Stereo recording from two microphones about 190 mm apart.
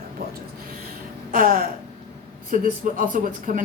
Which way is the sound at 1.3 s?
45° right (ahead or behind).